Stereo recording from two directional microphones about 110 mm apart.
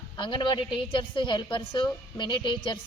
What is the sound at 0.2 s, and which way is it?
A woman's voice, 50° left (ahead or behind).